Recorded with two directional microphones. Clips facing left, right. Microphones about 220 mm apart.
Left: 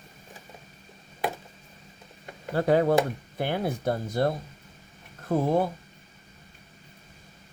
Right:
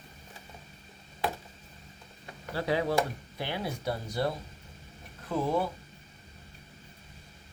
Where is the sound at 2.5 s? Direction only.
50° left (ahead or behind).